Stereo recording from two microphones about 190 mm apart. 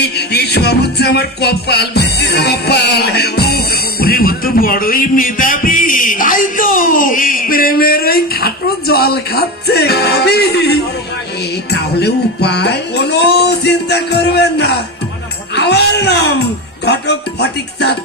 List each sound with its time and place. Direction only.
0.0 s music: 60° left (ahead or behind)
15.5 s speech: 60° left (ahead or behind)
16.8 s music: 60° left (ahead or behind)